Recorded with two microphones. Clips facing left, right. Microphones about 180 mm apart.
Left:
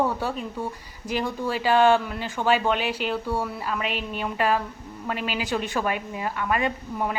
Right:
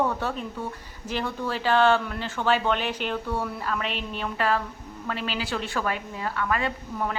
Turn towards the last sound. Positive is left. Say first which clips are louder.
# left 2 dB
turn(degrees=15)  # may be behind; listen again after turning